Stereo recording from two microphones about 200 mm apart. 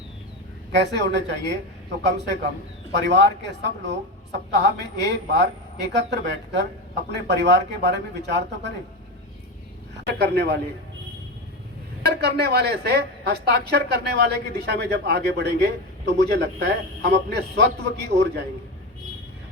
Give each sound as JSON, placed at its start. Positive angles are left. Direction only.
{"t": 0.7, "sound": "a woman's voice", "side_deg": -60}
{"t": 10.2, "sound": "a man's voice", "side_deg": -55}
{"t": 12.0, "sound": "a woman's voice", "side_deg": -55}